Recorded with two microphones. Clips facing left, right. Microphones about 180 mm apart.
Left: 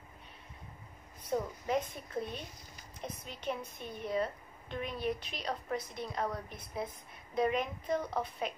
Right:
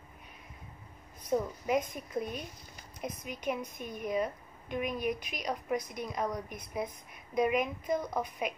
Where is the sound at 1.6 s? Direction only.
10° right (ahead or behind).